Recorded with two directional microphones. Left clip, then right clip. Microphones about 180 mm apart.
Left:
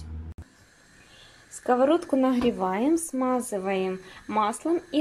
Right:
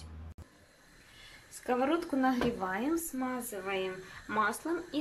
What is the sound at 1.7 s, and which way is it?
Speech, 20° left (ahead or behind).